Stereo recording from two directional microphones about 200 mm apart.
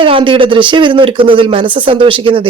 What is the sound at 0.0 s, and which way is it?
Speech, 25° right (ahead or behind).